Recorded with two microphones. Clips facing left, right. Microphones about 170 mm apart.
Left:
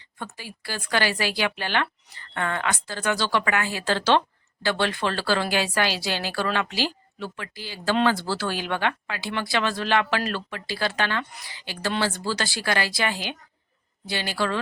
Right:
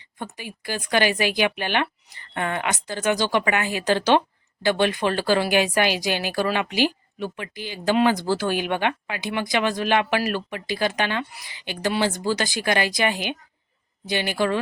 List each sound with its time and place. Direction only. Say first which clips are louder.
0.3 s a woman's voice: right 7 dB; 15° right (ahead or behind)